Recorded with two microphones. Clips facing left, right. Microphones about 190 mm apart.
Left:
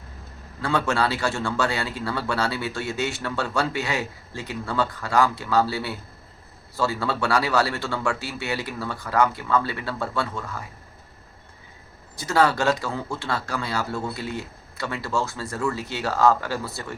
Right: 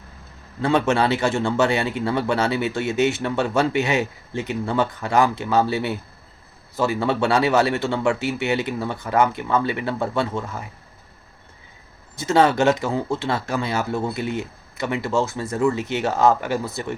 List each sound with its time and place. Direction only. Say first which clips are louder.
0.6 s a man's voice: right 5 dB; 20° right (ahead or behind)
12.1 s a man's voice: right 4 dB; 25° right (ahead or behind)